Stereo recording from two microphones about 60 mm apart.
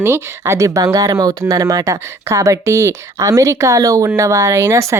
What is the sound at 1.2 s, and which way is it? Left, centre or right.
Speech, right.